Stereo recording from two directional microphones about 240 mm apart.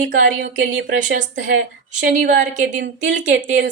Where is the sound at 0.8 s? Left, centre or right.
Right.